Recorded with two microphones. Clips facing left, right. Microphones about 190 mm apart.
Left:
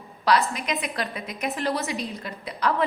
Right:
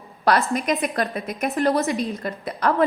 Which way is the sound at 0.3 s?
50° right (ahead or behind).